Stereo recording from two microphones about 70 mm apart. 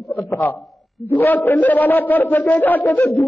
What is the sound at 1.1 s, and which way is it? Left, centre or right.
A man's voice, left.